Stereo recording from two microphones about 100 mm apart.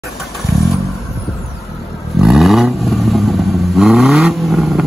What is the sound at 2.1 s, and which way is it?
Vehicle, centre (ahead or behind).